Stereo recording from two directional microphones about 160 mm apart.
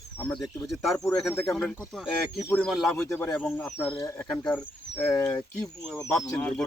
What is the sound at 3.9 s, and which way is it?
Speech, 20° left (ahead or behind).